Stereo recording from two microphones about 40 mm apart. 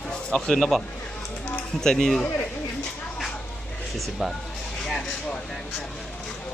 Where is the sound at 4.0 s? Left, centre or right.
Centre.